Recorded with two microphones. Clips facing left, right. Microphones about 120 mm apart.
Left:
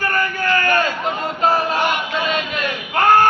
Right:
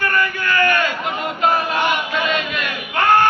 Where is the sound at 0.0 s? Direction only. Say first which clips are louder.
Even; 40° left (ahead or behind).